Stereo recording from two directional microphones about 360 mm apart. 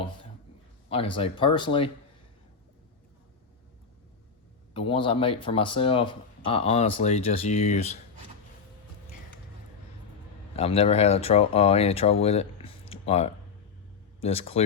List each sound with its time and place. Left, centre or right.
0.9 s speech: centre
4.7 s speech: centre
10.5 s speech: centre
12.2 s a sound: centre
14.2 s speech: centre